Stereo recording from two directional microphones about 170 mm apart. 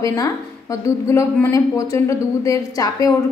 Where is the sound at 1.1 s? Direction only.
15° left (ahead or behind).